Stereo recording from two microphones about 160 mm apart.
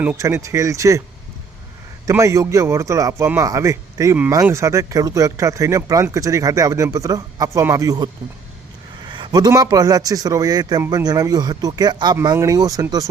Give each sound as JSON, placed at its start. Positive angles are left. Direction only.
{"t": 0.0, "sound": "speech", "side_deg": -15}
{"t": 2.0, "sound": "speech", "side_deg": -20}